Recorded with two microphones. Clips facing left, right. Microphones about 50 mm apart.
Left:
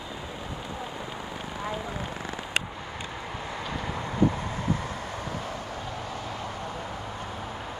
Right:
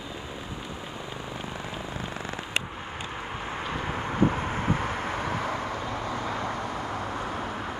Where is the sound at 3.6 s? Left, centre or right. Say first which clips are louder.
Right 2 dB; right.